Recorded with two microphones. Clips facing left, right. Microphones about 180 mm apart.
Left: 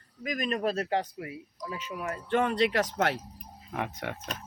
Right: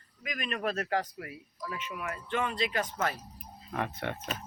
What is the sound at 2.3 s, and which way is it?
Speech, 55° left (ahead or behind).